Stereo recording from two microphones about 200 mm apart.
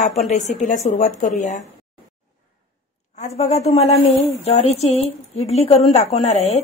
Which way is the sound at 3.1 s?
35° left (ahead or behind).